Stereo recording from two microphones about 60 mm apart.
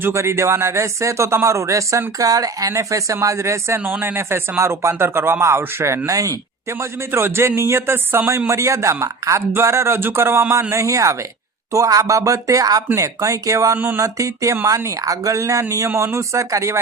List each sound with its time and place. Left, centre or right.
0.0 s speech: right
4.0 s speech: right
6.1 s speech: right
6.7 s speech: right
8.4 s speech: right
9.5 s speech: right
10.8 s speech: right